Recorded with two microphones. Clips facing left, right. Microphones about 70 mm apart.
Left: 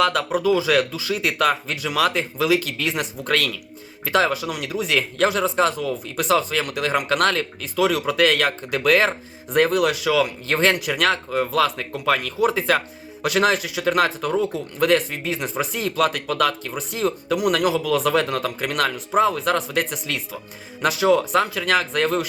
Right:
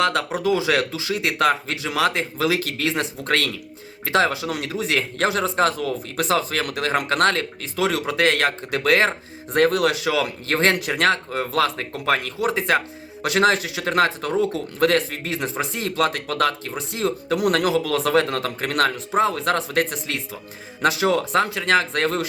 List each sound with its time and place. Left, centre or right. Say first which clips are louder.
0.0 s speech: left 1 dB; right
12.5 s speech: right 2 dB; right
15.7 s speech: left 2 dB; right